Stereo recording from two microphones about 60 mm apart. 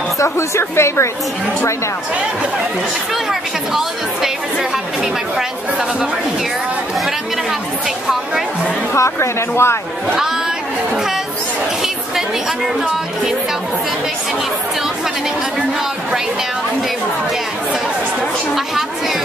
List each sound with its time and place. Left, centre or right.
0.2 s speech: left
3.3 s speech: centre
8.9 s speech: left